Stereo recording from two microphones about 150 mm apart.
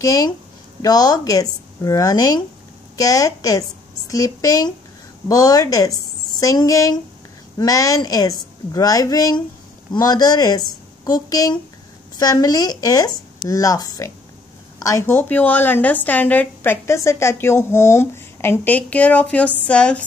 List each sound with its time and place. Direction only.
0.0 s a woman's voice: 20° left (ahead or behind)